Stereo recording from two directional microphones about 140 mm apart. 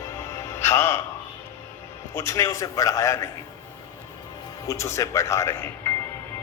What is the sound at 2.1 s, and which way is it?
Speech, 20° left (ahead or behind).